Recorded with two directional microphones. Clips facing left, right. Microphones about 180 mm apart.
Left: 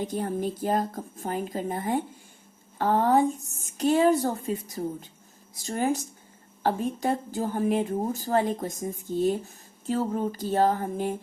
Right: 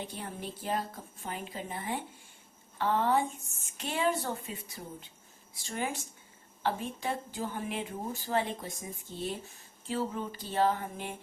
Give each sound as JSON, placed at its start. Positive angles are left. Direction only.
{"t": 0.0, "sound": "a woman's voice", "side_deg": 45}